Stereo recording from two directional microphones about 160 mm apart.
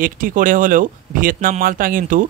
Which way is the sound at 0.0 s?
60° right (ahead or behind).